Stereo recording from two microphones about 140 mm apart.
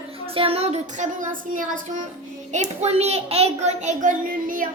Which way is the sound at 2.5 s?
55° right (ahead or behind).